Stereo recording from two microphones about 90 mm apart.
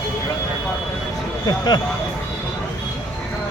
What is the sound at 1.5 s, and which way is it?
Speech, 50° left (ahead or behind).